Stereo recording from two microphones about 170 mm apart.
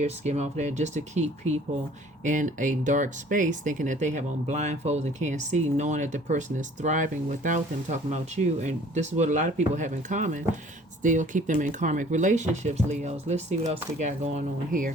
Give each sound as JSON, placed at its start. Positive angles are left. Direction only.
{"t": 0.0, "sound": "speech", "side_deg": -40}